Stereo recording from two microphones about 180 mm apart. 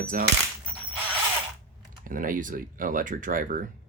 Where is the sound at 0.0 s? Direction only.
50° right (ahead or behind).